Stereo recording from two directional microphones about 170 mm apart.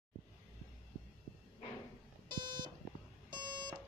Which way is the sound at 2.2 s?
25° right (ahead or behind).